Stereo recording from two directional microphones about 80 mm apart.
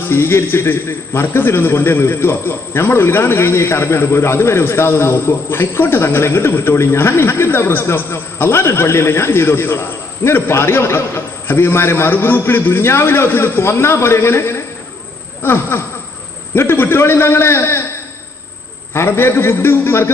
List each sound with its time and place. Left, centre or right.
0.1 s a man's voice: left
15.4 s insect: left
16.5 s a man's voice: left
18.9 s a man's voice: left